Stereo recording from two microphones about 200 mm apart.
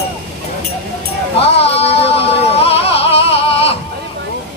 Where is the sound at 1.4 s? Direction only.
30° left (ahead or behind).